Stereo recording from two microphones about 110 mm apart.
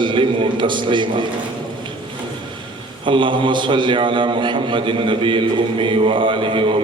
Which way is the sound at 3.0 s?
45° right (ahead or behind).